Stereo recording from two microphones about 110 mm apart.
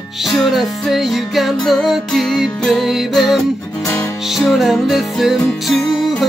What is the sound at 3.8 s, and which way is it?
Music, 30° left (ahead or behind).